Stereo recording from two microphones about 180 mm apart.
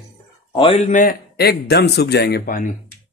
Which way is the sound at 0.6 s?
30° left (ahead or behind).